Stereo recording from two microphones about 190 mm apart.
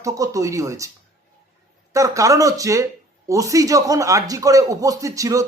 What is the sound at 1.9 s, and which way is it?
Speech, 15° right (ahead or behind).